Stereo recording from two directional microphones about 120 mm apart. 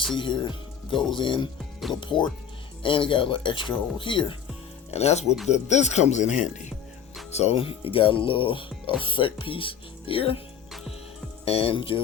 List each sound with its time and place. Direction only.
0.2 s speech: 45° left (ahead or behind)
4.9 s speech: 65° left (ahead or behind)
5.5 s speech: 75° left (ahead or behind)
7.3 s speech: 60° left (ahead or behind)
11.4 s speech: 55° left (ahead or behind)